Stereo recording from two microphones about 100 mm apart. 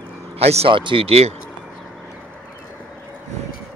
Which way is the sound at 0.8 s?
65° right (ahead or behind).